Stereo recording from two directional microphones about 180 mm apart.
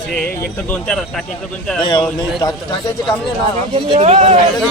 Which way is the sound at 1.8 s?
25° left (ahead or behind).